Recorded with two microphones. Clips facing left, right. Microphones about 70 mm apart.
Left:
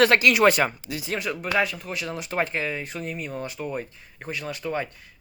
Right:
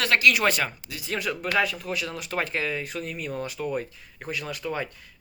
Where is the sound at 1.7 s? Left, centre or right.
Centre.